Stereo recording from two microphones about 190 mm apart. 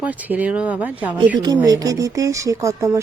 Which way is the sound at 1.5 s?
20° right (ahead or behind).